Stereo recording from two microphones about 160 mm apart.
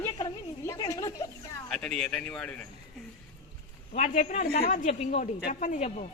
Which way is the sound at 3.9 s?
50° left (ahead or behind).